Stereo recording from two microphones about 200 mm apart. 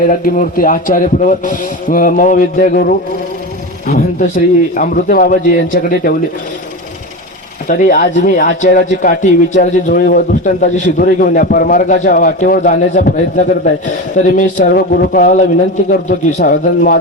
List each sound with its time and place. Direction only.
0.1 s a man's voice: 45° left (ahead or behind)
7.7 s a man's voice: 40° left (ahead or behind)